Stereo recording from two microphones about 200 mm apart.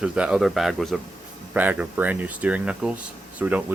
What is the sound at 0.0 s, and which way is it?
Speech, 5° right (ahead or behind).